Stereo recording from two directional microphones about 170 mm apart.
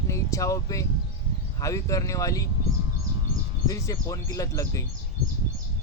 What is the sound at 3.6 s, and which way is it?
Speech, 20° left (ahead or behind).